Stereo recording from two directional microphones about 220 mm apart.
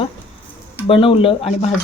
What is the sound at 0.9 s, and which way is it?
Speech, 25° left (ahead or behind).